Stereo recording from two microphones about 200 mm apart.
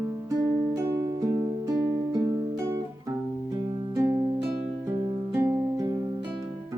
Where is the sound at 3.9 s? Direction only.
15° right (ahead or behind).